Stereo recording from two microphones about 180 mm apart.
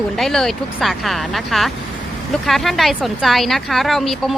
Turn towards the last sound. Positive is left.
turn(degrees=0)  # may be behind; listen again after turning